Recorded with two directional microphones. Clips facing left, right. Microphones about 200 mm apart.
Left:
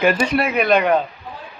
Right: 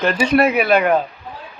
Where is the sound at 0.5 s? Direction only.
5° right (ahead or behind).